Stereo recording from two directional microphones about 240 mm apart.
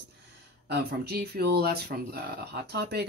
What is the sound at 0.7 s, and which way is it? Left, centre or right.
Speech, right.